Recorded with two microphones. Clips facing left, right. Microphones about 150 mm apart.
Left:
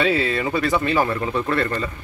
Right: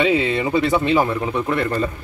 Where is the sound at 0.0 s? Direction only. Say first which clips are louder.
Right 2 dB; 15° right (ahead or behind).